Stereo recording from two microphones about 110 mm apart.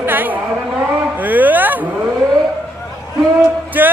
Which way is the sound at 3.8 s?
15° right (ahead or behind).